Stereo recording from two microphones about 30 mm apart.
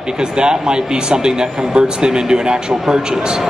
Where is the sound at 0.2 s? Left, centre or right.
Right.